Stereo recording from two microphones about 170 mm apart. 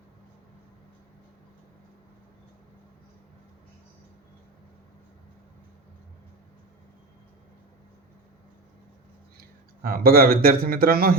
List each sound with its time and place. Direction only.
9.4 s a man's voice: 60° right (ahead or behind)